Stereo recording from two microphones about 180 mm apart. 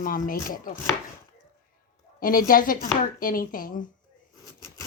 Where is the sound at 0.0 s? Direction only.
50° left (ahead or behind).